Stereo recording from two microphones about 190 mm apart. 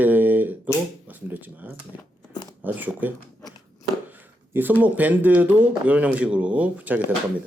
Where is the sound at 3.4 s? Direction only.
20° left (ahead or behind).